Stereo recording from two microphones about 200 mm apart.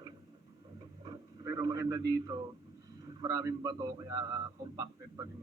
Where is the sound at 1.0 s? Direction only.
15° right (ahead or behind).